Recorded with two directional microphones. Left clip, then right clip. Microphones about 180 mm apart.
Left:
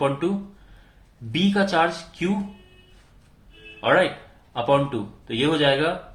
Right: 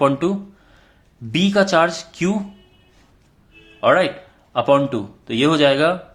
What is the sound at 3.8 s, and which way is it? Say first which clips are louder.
Speech: right 4 dB; 50° right (ahead or behind).